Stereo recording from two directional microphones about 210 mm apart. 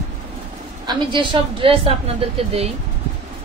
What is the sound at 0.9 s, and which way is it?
A woman's voice, 20° right (ahead or behind).